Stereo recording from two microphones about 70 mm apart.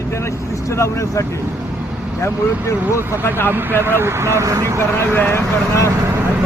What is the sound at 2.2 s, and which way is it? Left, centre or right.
Speech, left.